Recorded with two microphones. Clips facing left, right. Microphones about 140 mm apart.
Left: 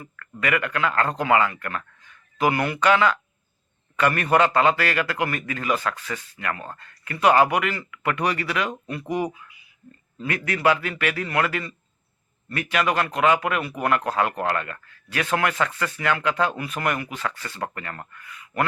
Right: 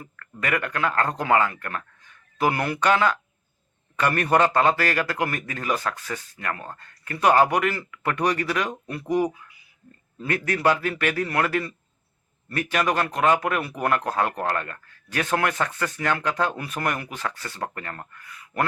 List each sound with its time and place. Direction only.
0.2 s speech: 40° right (ahead or behind)
9.0 s speech: 10° left (ahead or behind)
10.2 s speech: 40° right (ahead or behind)